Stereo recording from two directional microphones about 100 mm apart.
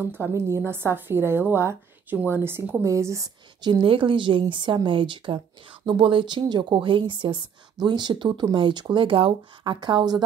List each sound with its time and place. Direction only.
0.2 s a woman's voice: 30° right (ahead or behind)
3.6 s speech: 55° right (ahead or behind)
8.9 s speech: 60° right (ahead or behind)